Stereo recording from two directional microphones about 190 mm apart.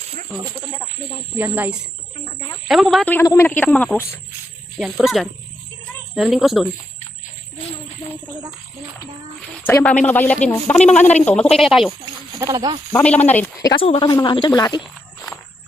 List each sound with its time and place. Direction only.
0.3 s speech: 10° right (ahead or behind)
2.1 s cricket: 25° left (ahead or behind)
2.6 s speech: centre (ahead or behind)
9.6 s speech: 10° left (ahead or behind)
12.0 s speech: 20° right (ahead or behind)
12.9 s speech: 10° left (ahead or behind)
13.8 s speech: 30° left (ahead or behind)